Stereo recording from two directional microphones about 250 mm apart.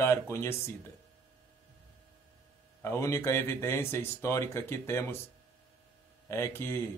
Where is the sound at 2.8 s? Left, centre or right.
Centre.